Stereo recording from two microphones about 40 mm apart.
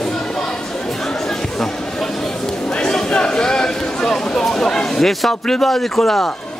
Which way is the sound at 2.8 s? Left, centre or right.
Left.